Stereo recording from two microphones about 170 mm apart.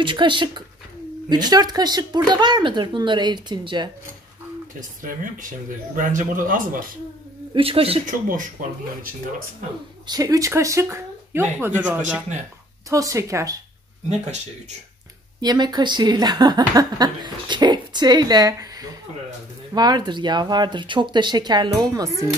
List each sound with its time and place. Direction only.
0.0 s speech: 30° right (ahead or behind)
4.7 s speech: 50° right (ahead or behind)
7.5 s speech: 35° right (ahead or behind)
8.3 s speech: 55° right (ahead or behind)
10.0 s a woman's voice: 20° right (ahead or behind)
15.4 s speech: 25° right (ahead or behind)